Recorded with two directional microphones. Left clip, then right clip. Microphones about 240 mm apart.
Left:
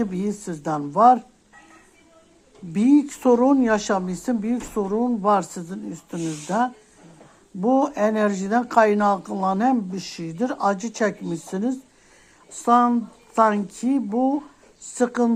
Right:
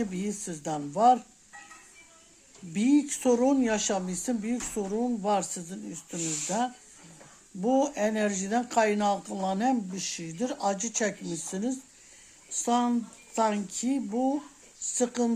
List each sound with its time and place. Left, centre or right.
0.0 s speech: centre
2.7 s a woman's voice: centre